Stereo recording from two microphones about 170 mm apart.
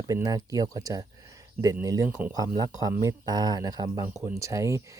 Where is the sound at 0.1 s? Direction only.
20° right (ahead or behind).